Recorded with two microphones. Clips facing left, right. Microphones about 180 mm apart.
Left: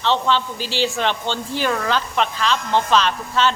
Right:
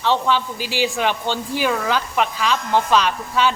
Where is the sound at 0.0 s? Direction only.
10° right (ahead or behind).